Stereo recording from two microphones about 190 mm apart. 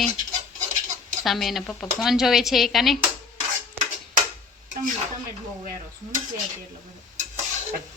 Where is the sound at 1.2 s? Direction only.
Centre (ahead or behind).